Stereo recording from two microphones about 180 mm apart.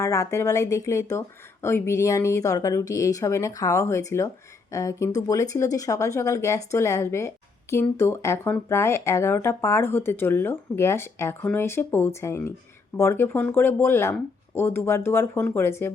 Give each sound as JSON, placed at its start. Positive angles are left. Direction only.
{"t": 0.0, "sound": "speech", "side_deg": 15}